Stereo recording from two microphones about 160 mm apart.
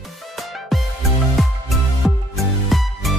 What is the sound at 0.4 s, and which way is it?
Music, centre (ahead or behind).